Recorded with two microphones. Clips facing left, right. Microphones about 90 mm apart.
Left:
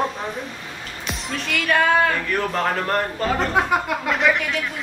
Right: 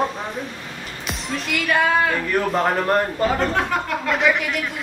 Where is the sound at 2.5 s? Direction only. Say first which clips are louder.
Right 4 dB; 15° right (ahead or behind).